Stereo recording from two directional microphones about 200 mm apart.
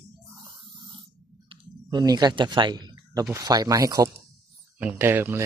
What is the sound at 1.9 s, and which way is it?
Speech, 20° right (ahead or behind).